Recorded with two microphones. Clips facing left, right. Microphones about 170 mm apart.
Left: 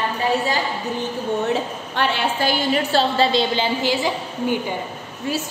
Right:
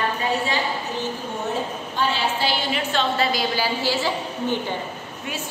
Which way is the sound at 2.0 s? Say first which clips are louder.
Left 2 dB; 55° left (ahead or behind).